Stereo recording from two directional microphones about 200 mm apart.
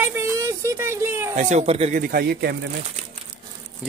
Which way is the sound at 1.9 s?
50° right (ahead or behind).